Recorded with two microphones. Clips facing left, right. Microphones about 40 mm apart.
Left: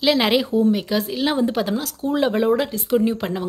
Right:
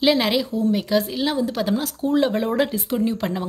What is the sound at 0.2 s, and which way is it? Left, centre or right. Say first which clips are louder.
Speech: left 3 dB; centre.